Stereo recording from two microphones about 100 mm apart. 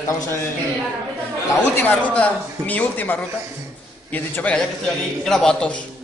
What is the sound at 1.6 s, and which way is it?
A man's voice, 15° left (ahead or behind).